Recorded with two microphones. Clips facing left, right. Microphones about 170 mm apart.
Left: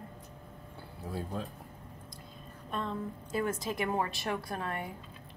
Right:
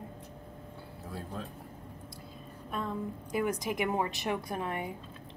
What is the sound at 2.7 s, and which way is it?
A woman's voice, 10° right (ahead or behind).